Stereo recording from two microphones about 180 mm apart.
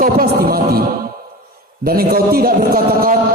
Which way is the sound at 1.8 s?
55° right (ahead or behind).